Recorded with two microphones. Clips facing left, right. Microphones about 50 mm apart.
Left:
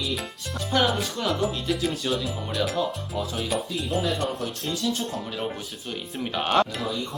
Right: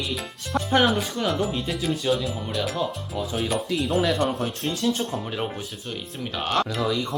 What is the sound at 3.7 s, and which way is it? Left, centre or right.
Speech, right.